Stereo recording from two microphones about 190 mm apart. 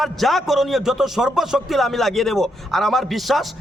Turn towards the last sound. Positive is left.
turn(degrees=0)  # may be behind; listen again after turning